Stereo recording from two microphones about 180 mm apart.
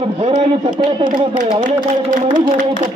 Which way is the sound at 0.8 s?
30° right (ahead or behind).